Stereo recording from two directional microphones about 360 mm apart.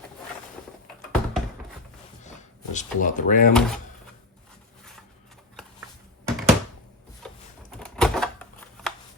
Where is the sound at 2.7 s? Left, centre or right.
Left.